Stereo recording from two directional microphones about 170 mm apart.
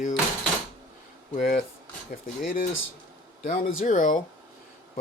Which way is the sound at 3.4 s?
50° left (ahead or behind).